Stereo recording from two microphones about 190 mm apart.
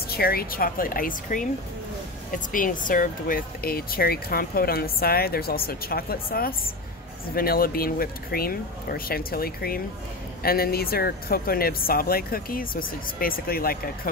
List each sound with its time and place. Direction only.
0.1 s speech: 55° left (ahead or behind)